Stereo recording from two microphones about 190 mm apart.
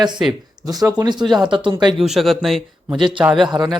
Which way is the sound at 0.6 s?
20° right (ahead or behind).